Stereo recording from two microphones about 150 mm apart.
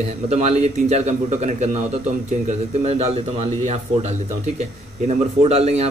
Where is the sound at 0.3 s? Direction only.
45° right (ahead or behind).